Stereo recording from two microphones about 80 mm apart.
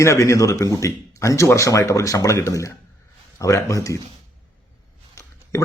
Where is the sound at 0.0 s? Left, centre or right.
Left.